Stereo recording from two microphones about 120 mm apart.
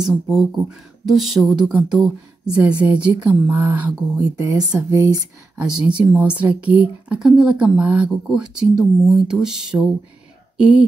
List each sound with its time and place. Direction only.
0.1 s speech: centre (ahead or behind)
4.4 s speech: 25° right (ahead or behind)
5.7 s speech: 10° right (ahead or behind)